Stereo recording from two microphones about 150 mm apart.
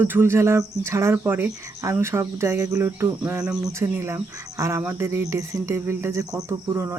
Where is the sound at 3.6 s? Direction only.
20° right (ahead or behind).